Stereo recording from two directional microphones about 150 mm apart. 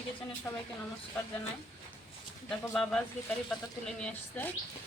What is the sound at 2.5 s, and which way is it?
Speech, 5° left (ahead or behind).